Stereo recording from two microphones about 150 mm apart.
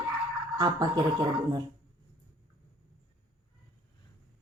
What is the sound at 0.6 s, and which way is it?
Speech, 25° right (ahead or behind).